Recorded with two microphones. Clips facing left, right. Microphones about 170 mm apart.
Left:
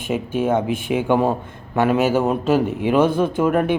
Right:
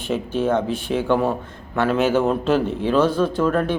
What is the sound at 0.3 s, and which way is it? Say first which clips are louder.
Speech: left 1 dB; 10° left (ahead or behind).